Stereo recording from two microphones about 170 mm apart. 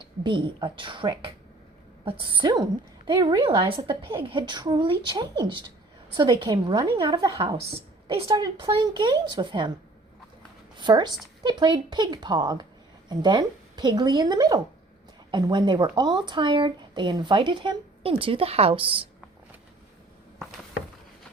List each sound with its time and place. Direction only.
0.0 s speech: 30° right (ahead or behind)
10.8 s speech: 25° right (ahead or behind)